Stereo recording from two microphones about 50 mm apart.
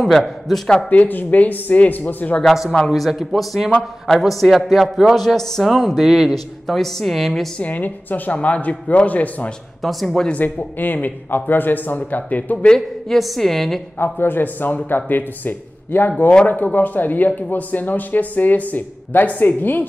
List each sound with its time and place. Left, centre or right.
0.0 s a man's voice: centre
0.8 s speech: left
2.4 s a man's voice: centre
7.5 s speech: left
9.8 s a man's voice: centre
10.3 s speech: left
12.6 s a man's voice: centre
14.1 s speech: left